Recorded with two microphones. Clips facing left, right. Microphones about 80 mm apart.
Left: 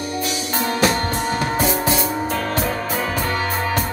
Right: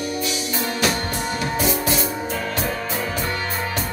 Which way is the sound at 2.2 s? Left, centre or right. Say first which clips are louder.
Left 3 dB; left.